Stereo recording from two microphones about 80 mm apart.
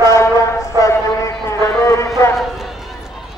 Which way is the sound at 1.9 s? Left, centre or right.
Left.